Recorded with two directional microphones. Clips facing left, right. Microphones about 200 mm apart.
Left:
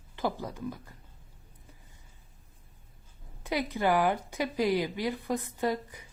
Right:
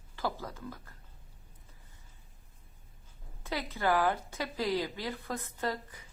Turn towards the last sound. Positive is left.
turn(degrees=15)  # may be behind; listen again after turning